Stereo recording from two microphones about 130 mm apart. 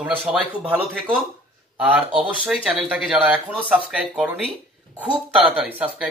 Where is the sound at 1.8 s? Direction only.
10° right (ahead or behind).